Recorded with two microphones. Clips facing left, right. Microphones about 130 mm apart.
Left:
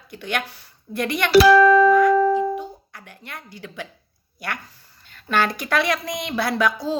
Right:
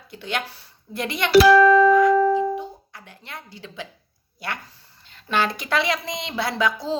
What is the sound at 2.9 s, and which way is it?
Speech, 25° right (ahead or behind).